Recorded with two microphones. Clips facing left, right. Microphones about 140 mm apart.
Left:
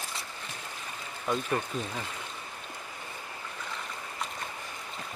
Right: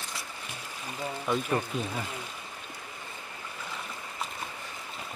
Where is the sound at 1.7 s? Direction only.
10° right (ahead or behind).